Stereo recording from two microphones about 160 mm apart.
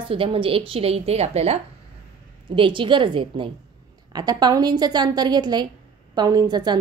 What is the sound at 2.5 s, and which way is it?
A woman's voice, 30° right (ahead or behind).